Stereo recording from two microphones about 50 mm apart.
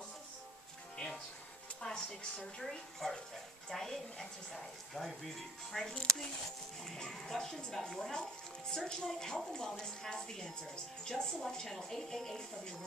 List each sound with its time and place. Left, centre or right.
0.9 s music: centre
1.8 s a woman's voice: centre